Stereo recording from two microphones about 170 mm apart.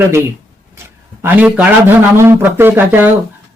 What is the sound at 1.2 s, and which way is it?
Speech, 10° right (ahead or behind).